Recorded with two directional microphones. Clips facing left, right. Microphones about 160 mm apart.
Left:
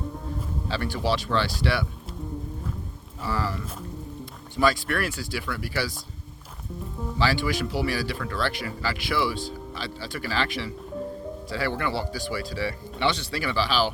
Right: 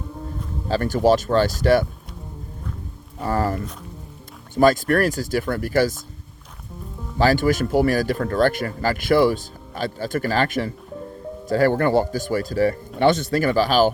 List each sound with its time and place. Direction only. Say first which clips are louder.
0.7 s speech: right 10 dB; 45° right (ahead or behind)
3.2 s speech: right 7 dB; 50° right (ahead or behind)
7.2 s speech: right 8 dB; 45° right (ahead or behind)